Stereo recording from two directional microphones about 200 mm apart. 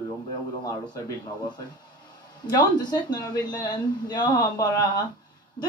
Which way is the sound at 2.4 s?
20° left (ahead or behind).